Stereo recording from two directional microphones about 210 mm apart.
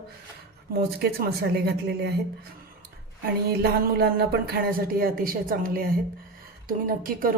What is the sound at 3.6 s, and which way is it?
Speech, 45° right (ahead or behind).